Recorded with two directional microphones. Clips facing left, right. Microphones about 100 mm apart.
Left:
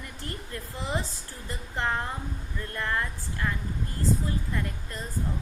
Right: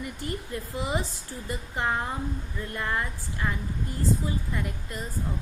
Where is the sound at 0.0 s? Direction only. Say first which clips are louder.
Right 5 dB; 15° right (ahead or behind).